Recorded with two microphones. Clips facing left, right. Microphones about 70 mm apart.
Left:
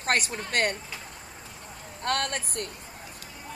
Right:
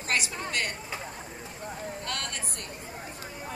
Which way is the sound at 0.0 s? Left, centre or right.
Left.